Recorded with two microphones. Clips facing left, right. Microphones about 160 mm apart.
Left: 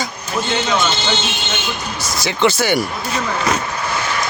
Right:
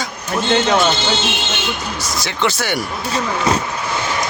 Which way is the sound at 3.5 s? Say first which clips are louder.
Right 3 dB; 25° right (ahead or behind).